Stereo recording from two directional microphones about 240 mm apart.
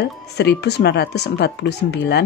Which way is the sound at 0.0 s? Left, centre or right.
Left.